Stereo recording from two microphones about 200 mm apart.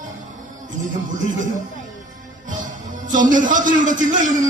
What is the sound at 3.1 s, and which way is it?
A man's voice, 40° right (ahead or behind).